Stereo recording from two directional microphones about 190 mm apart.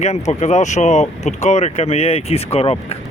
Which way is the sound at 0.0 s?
35° left (ahead or behind).